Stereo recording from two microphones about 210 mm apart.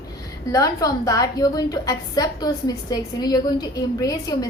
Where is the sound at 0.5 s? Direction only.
15° left (ahead or behind).